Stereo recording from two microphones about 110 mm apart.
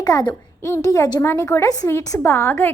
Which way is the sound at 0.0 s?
35° left (ahead or behind).